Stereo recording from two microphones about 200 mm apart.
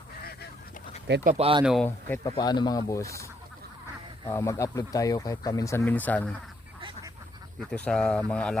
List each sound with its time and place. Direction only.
1.0 s speech: 55° right (ahead or behind)
1.3 s speech: 30° right (ahead or behind)
1.6 s speech: centre (ahead or behind)
2.0 s speech: 10° left (ahead or behind)
2.3 s speech: 20° left (ahead or behind)
4.3 s speech: 15° left (ahead or behind)
7.6 s speech: 5° left (ahead or behind)